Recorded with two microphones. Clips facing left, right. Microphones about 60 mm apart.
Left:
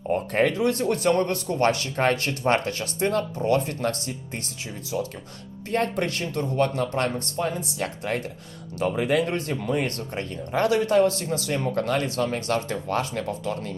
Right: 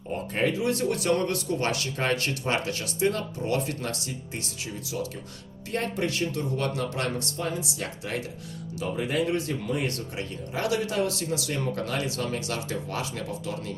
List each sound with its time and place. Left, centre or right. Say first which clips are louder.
0.3 s speech: left 3 dB; left
0.8 s speech: left 3 dB; left
5.7 s speech: left 4 dB; left
9.0 s speech: left 5 dB; left
9.2 s speech: left 1 dB; left